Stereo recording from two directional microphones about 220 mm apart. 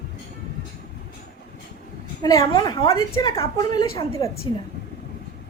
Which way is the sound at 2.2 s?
15° left (ahead or behind).